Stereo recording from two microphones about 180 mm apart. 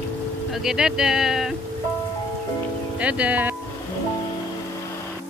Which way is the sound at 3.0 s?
5° right (ahead or behind).